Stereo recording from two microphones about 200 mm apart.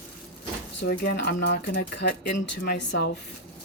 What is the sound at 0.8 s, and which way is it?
Speech, 55° left (ahead or behind).